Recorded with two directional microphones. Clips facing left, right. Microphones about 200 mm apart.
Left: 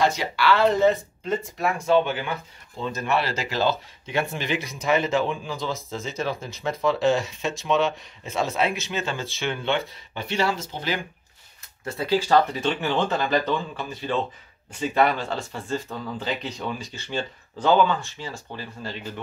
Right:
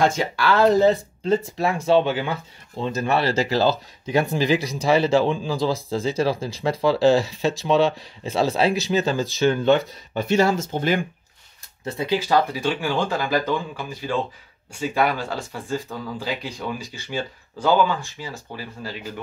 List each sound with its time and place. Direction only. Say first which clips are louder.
0.0 s speech: right 2 dB; 50° right (ahead or behind)
11.8 s speech: even; 15° right (ahead or behind); by 16.3 s centre (ahead or behind)
16.7 s speech: right 1 dB; 15° right (ahead or behind)